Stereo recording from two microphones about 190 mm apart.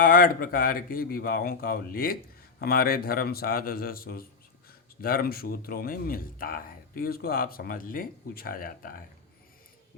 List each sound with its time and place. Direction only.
0.0 s speech: 45° left (ahead or behind)